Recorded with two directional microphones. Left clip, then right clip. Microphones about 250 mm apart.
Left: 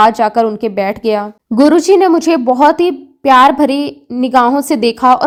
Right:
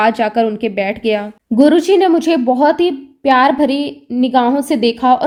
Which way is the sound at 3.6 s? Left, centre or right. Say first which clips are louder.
Left 2 dB; left.